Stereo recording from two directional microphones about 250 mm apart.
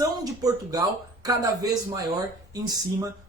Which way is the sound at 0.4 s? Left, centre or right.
Centre.